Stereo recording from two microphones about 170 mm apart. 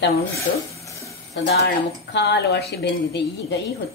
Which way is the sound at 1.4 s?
90° left.